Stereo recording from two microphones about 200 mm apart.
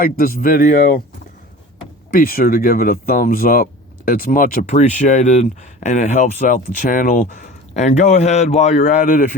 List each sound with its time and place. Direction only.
0.0 s speech: 45° left (ahead or behind)
2.0 s speech: 45° left (ahead or behind)